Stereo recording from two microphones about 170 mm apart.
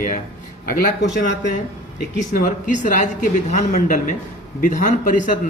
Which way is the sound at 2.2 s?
50° left (ahead or behind).